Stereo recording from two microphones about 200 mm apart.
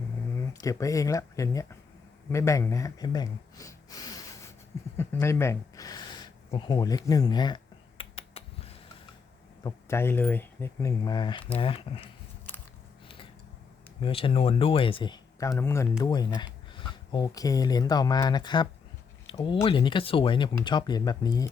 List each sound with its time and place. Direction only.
0.3 s speech: 15° left (ahead or behind)
4.9 s gasp: 15° left (ahead or behind); by 8.7 s 30° left (ahead or behind)
9.6 s speech: 10° left (ahead or behind)
14.0 s speech: 25° left (ahead or behind)